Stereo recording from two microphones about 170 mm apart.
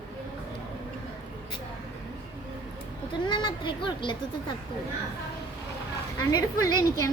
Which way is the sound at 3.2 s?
25° left (ahead or behind).